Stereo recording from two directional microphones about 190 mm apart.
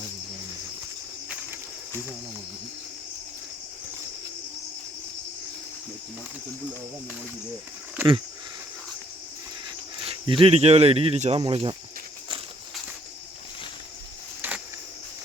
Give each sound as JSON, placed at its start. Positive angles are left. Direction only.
{"t": 8.0, "sound": "speech", "side_deg": -10}
{"t": 10.0, "sound": "speech", "side_deg": -25}